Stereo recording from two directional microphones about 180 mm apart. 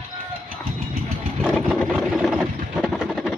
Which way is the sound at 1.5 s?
5° left (ahead or behind).